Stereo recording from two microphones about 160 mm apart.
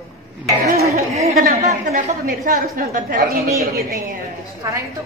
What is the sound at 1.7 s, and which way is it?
A woman's voice, 45° right (ahead or behind).